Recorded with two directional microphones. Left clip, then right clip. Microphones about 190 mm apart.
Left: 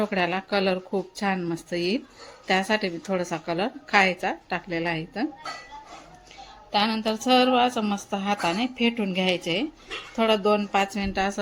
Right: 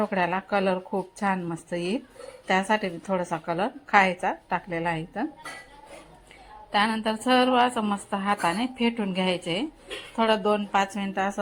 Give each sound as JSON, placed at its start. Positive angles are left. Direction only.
{"t": 0.0, "sound": "a woman's voice", "side_deg": 10}
{"t": 6.7, "sound": "a woman's voice", "side_deg": 0}